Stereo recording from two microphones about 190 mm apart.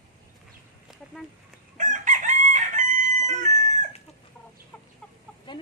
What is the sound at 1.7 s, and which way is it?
Chicken, 40° right (ahead or behind).